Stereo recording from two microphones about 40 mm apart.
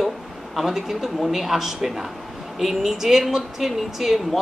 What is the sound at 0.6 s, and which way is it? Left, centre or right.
A woman's voice, centre.